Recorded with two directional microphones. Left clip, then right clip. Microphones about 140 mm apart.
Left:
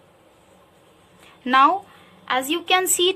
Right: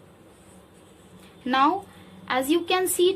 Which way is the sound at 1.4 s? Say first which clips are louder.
Left 6 dB; 35° left (ahead or behind).